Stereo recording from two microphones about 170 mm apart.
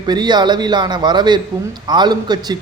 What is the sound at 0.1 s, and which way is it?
A man's voice, 25° right (ahead or behind).